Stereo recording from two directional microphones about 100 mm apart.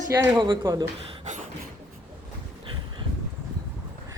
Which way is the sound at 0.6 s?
30° right (ahead or behind).